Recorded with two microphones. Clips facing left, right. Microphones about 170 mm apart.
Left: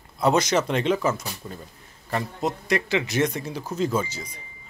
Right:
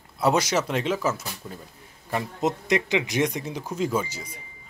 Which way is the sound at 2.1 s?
20° right (ahead or behind).